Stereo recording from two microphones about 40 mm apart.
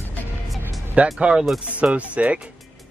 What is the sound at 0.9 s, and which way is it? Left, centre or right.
Speech, right.